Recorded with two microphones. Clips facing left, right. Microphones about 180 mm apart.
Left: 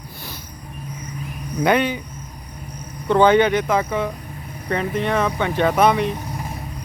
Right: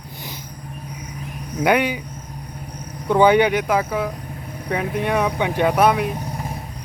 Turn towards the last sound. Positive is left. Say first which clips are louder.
# even
turn(degrees=-5)  # may be behind; listen again after turning